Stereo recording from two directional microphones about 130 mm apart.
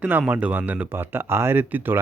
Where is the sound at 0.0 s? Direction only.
15° right (ahead or behind).